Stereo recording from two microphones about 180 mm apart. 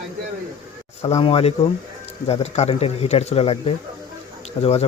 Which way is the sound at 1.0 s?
35° left (ahead or behind).